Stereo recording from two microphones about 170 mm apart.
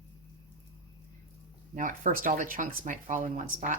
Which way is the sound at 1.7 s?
50° right (ahead or behind).